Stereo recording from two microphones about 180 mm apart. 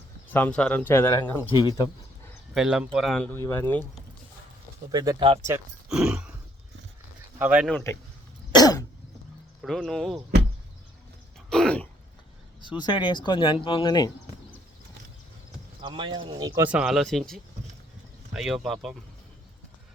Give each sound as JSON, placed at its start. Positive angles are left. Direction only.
{"t": 0.3, "sound": "speech", "side_deg": 5}
{"t": 2.6, "sound": "speech", "side_deg": -5}
{"t": 4.9, "sound": "speech", "side_deg": -20}
{"t": 5.9, "sound": "a sound", "side_deg": -5}
{"t": 7.3, "sound": "speech", "side_deg": -5}
{"t": 7.7, "sound": "speech", "side_deg": 10}
{"t": 8.5, "sound": "cough", "side_deg": 20}
{"t": 9.6, "sound": "speech", "side_deg": 0}
{"t": 11.3, "sound": "throat clearing", "side_deg": 5}
{"t": 12.6, "sound": "speech", "side_deg": 25}
{"t": 15.8, "sound": "speech", "side_deg": -30}
{"t": 16.6, "sound": "speech", "side_deg": -5}